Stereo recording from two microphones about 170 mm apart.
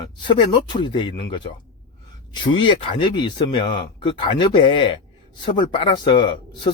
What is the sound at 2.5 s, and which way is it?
Speech, 30° left (ahead or behind).